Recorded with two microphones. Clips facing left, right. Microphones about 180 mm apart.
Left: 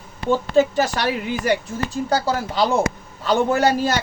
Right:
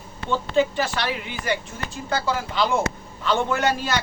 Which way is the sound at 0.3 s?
40° left (ahead or behind).